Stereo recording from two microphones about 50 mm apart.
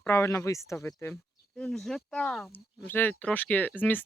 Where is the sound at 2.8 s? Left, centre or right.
Left.